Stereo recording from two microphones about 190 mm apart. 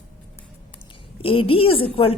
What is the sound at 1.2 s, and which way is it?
Speech, 30° left (ahead or behind).